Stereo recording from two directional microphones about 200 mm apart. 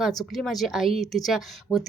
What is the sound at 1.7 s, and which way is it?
Speech, 20° left (ahead or behind).